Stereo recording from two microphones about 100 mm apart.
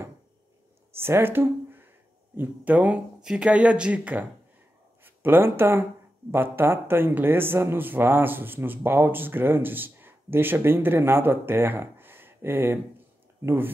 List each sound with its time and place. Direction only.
0.9 s speech: 25° right (ahead or behind)